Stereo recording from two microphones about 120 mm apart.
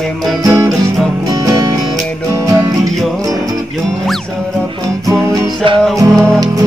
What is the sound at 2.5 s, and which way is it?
Music, 30° right (ahead or behind).